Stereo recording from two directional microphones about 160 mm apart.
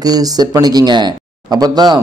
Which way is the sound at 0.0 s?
25° right (ahead or behind).